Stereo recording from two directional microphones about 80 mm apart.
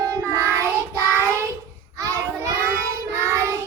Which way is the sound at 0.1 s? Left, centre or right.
Right.